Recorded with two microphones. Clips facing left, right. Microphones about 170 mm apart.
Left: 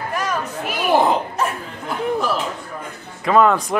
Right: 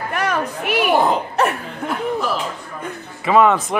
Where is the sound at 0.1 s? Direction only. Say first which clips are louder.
Right 3 dB; 65° right (ahead or behind).